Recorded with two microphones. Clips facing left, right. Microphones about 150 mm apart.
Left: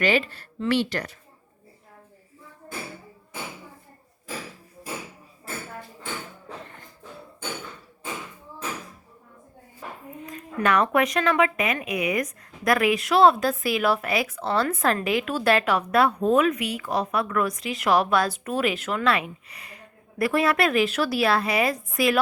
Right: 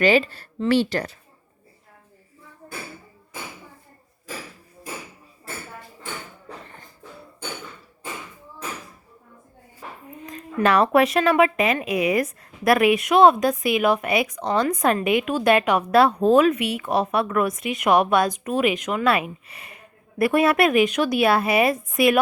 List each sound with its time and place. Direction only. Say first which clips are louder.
0.0 s speech: right 5 dB; 35° right (ahead or behind)
10.2 s speech: right 3 dB; 35° right (ahead or behind); by 15.8 s 15° right (ahead or behind)
15.9 s speech: right 5 dB; 30° right (ahead or behind); by 19.0 s 15° right (ahead or behind)
19.0 s speech: right 3 dB; 25° right (ahead or behind)